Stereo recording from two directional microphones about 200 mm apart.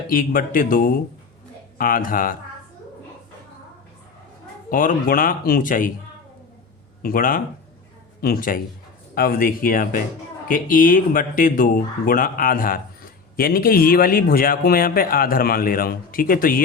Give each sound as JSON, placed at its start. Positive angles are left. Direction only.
{"t": 0.1, "sound": "speech", "side_deg": 45}
{"t": 4.7, "sound": "speech", "side_deg": 45}
{"t": 7.0, "sound": "speech", "side_deg": 45}